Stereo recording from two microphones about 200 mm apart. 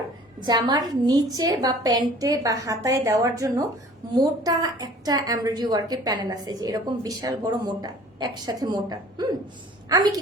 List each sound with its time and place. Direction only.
0.3 s a woman's voice: 20° right (ahead or behind)